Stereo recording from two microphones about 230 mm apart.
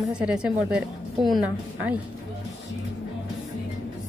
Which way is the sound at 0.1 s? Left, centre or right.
Centre.